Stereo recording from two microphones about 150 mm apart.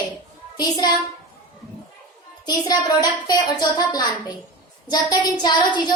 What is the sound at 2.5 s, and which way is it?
A woman's voice, 25° left (ahead or behind).